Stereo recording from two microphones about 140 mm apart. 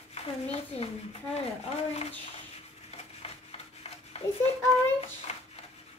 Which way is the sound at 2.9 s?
45° left (ahead or behind).